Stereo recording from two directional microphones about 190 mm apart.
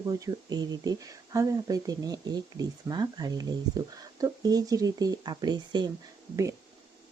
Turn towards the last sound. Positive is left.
turn(degrees=-15)  # may be behind; listen again after turning